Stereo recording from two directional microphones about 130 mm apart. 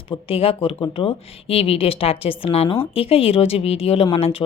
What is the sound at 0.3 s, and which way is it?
Speech, 45° left (ahead or behind).